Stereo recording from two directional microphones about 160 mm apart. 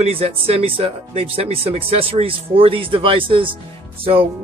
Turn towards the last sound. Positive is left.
turn(degrees=-35)  # may be behind; listen again after turning